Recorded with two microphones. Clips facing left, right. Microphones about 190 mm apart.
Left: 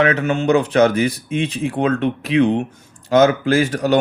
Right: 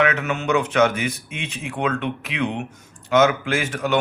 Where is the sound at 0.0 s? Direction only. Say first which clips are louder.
Left 5 dB; 35° left (ahead or behind).